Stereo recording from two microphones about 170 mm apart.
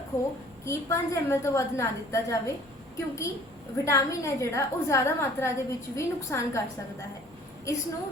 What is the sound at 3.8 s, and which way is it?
A woman's voice, 15° left (ahead or behind).